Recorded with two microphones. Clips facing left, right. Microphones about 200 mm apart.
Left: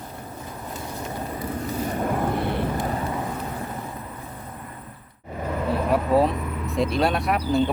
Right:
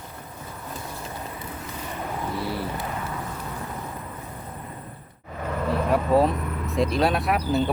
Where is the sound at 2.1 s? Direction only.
55° left (ahead or behind).